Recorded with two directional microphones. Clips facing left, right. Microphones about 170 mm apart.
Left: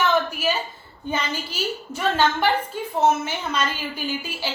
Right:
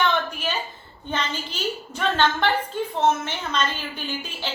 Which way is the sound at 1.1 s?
10° left (ahead or behind).